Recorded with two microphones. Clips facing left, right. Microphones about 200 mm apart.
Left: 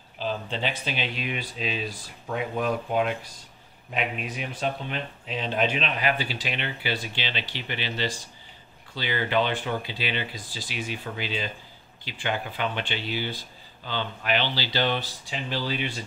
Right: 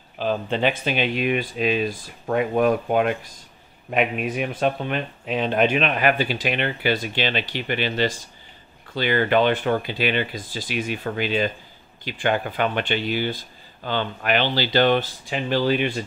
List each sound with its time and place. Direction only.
0.2 s speech: 55° right (ahead or behind)